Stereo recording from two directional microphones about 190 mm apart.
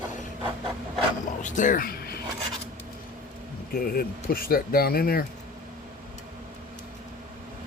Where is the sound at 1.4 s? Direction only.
40° left (ahead or behind).